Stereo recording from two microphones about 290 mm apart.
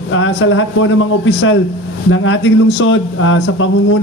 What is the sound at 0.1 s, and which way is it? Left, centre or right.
Speech, left.